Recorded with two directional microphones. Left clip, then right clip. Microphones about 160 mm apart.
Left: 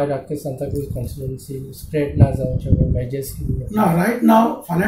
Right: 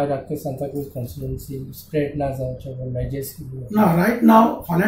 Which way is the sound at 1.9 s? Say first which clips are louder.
Left 1 dB; 15° left (ahead or behind).